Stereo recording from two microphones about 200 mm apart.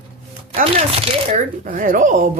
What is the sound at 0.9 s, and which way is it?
Speech, 30° right (ahead or behind).